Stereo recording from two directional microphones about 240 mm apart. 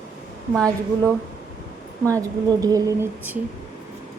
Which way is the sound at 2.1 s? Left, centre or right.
Centre.